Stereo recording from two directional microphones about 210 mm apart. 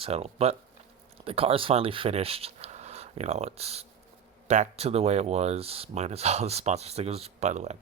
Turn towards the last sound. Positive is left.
turn(degrees=-35)  # may be behind; listen again after turning